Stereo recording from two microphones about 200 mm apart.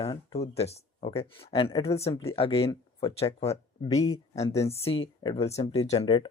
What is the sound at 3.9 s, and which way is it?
Speech, 20° left (ahead or behind).